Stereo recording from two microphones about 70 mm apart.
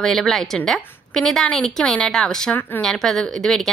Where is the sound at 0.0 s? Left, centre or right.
Centre.